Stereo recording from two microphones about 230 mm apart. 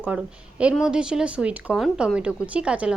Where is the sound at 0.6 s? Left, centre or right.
Centre.